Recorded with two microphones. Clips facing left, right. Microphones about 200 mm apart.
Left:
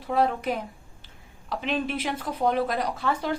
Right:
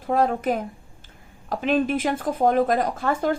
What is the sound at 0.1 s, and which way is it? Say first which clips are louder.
A woman's voice: right 3 dB; 45° right (ahead or behind).